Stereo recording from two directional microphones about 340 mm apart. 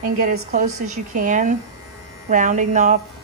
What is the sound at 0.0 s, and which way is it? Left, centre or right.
A woman's voice, right.